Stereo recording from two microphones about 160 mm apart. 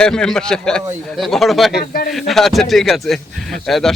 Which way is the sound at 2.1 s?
Centre (ahead or behind).